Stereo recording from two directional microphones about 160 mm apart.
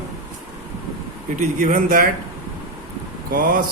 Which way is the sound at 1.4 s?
55° right (ahead or behind).